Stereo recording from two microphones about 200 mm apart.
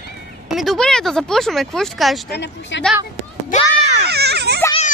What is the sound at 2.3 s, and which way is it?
Speech, 60° left (ahead or behind).